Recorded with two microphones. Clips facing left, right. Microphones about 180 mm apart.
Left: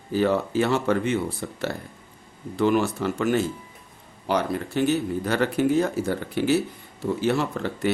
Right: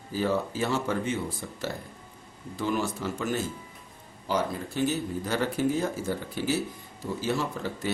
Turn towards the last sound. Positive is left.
turn(degrees=65)  # may be behind; listen again after turning